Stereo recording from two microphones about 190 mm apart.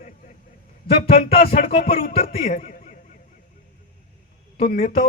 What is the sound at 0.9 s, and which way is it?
A man's voice, 30° left (ahead or behind).